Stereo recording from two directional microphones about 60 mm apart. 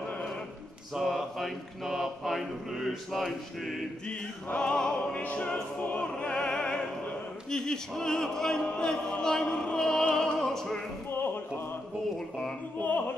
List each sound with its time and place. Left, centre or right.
0.9 s a sound: centre
4.6 s music: centre
5.1 s opera: left
5.9 s music: centre
11.1 s opera: left
12.7 s music: left